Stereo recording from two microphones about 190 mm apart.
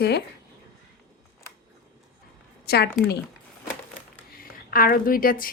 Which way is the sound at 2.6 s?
60° left (ahead or behind).